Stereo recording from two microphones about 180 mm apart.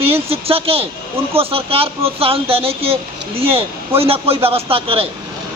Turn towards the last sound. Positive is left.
turn(degrees=-30)  # may be behind; listen again after turning